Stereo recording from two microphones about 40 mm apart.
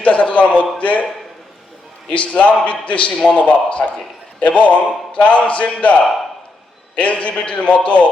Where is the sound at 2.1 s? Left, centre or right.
Left.